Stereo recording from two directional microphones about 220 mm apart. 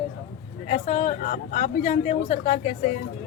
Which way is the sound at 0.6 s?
35° left (ahead or behind).